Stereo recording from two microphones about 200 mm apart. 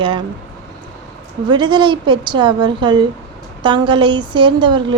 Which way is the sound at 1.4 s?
25° right (ahead or behind).